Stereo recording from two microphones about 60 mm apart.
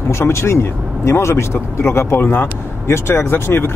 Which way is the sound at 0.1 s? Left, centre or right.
Left.